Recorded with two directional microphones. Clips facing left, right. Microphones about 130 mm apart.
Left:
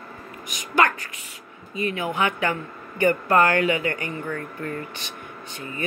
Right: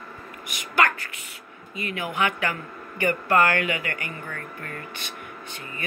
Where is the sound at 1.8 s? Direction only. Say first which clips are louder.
Left 3 dB; 25° left (ahead or behind).